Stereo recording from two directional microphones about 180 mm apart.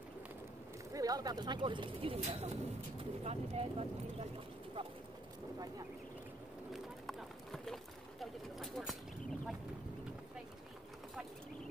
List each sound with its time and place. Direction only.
0.9 s speech: 20° right (ahead or behind)
6.7 s run: centre (ahead or behind)